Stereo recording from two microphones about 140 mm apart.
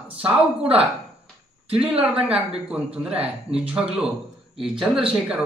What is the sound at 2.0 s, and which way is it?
Speech, 10° right (ahead or behind).